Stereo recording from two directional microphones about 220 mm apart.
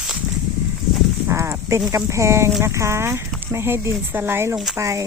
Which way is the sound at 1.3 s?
15° right (ahead or behind).